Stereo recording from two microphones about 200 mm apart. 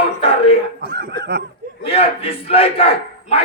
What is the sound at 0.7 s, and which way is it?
Chuckle, 60° right (ahead or behind).